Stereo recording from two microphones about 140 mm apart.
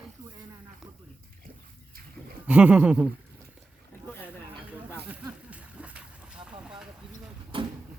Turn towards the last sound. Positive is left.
turn(degrees=-40)  # may be behind; listen again after turning